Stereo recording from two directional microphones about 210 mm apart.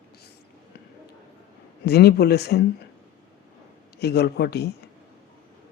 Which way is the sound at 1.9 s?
50° left (ahead or behind).